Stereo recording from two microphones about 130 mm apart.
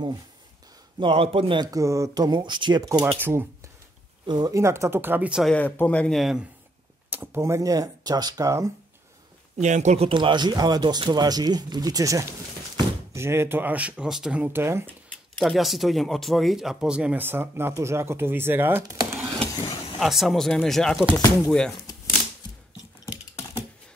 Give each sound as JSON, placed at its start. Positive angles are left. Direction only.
{"t": 0.9, "sound": "a man's voice", "side_deg": -45}
{"t": 1.7, "sound": "speech", "side_deg": -25}
{"t": 3.2, "sound": "speech", "side_deg": -15}
{"t": 4.3, "sound": "speech", "side_deg": -30}
{"t": 5.4, "sound": "speech", "side_deg": 10}
{"t": 6.1, "sound": "speech", "side_deg": 0}
{"t": 7.1, "sound": "speech", "side_deg": -15}
{"t": 9.6, "sound": "speech", "side_deg": -65}
{"t": 15.3, "sound": "speech", "side_deg": 0}
{"t": 18.9, "sound": "a sound", "side_deg": -20}
{"t": 20.0, "sound": "speech", "side_deg": 0}